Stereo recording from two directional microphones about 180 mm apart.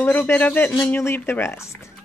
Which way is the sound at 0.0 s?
10° left (ahead or behind).